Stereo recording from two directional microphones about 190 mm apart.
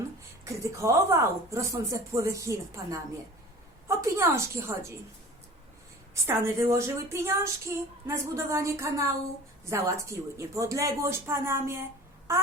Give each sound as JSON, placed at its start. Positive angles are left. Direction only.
{"t": 0.4, "sound": "a woman's voice", "side_deg": -15}
{"t": 6.2, "sound": "a woman's voice", "side_deg": -15}